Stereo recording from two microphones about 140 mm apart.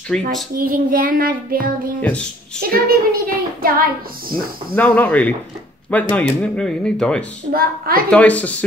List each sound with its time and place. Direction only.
0.1 s speech: 5° left (ahead or behind)
0.6 s child singing: 90° right
2.0 s speech: 10° left (ahead or behind)
2.6 s child singing: 90° right
4.3 s speech: 10° left (ahead or behind)
7.5 s child singing: 90° right
8.1 s speech: 10° left (ahead or behind)